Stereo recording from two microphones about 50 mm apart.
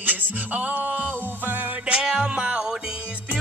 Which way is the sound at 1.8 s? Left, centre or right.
Centre.